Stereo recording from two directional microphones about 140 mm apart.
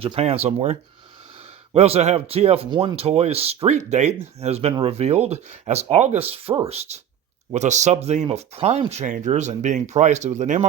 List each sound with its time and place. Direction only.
0.0 s speech: 45° right (ahead or behind); by 10.7 s 60° right (ahead or behind)